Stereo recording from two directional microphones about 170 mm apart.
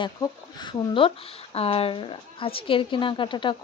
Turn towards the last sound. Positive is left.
turn(degrees=30)  # may be behind; listen again after turning